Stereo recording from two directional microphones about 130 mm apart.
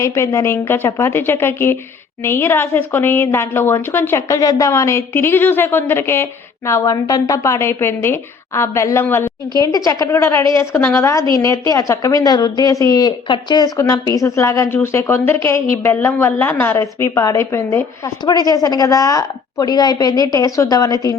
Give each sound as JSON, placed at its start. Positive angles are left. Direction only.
{"t": 0.0, "sound": "a woman's voice", "side_deg": 25}
{"t": 9.5, "sound": "a woman's voice", "side_deg": 30}
{"t": 18.3, "sound": "a woman's voice", "side_deg": 30}